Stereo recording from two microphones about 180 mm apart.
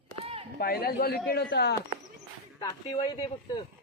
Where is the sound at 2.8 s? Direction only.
25° left (ahead or behind).